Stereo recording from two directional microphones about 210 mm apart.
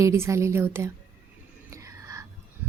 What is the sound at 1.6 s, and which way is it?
Whispering, 15° right (ahead or behind).